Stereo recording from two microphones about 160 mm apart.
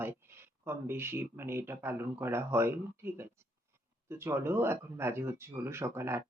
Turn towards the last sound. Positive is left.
turn(degrees=-15)  # may be behind; listen again after turning